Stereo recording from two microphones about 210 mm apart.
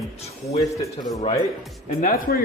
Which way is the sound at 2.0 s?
40° left (ahead or behind).